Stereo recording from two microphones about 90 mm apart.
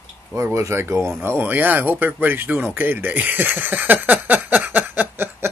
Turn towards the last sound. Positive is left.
turn(degrees=-20)  # may be behind; listen again after turning